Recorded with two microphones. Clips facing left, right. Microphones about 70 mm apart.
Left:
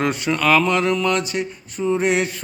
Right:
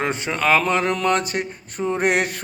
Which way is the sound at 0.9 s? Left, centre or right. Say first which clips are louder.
Even; right.